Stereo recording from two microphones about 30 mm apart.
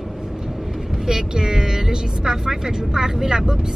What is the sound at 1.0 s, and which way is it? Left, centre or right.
Speech, right.